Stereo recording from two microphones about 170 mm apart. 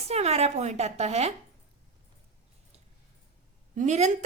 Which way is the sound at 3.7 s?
45° right (ahead or behind).